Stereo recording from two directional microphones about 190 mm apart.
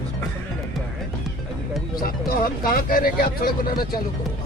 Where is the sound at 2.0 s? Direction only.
50° left (ahead or behind).